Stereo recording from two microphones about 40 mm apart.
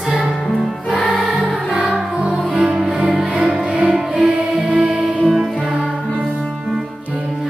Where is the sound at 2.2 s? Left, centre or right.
Right.